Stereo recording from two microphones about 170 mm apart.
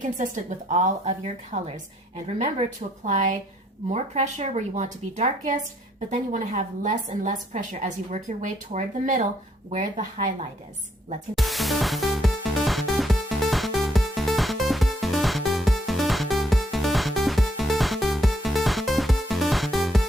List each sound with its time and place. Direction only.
0.0 s a woman's voice: 50° right (ahead or behind)
11.3 s music: centre (ahead or behind)